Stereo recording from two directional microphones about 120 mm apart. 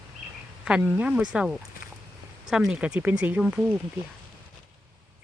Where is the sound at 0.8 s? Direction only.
10° right (ahead or behind).